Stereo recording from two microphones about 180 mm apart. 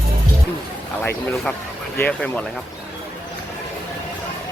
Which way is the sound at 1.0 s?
10° left (ahead or behind).